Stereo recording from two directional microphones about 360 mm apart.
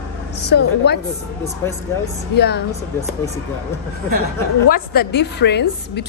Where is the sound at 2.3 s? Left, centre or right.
Left.